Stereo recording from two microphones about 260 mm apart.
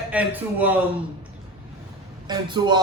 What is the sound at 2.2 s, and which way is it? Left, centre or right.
Speech, centre.